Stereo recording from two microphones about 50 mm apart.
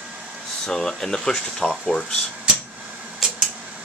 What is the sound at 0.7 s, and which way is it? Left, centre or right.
Speech, centre.